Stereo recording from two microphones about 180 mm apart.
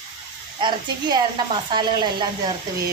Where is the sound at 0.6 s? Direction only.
25° right (ahead or behind).